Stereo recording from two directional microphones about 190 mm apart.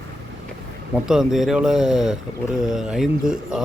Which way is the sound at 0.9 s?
5° right (ahead or behind).